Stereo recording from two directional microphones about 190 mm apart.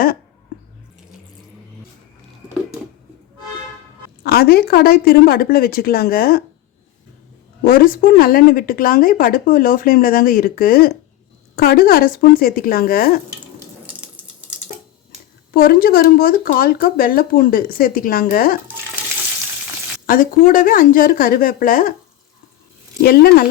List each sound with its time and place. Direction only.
4.2 s speech: 55° left (ahead or behind)
7.6 s speech: 50° left (ahead or behind)
14.0 s water: 5° right (ahead or behind)
15.5 s speech: 50° left (ahead or behind)
20.1 s speech: 45° left (ahead or behind)
23.0 s speech: 55° left (ahead or behind)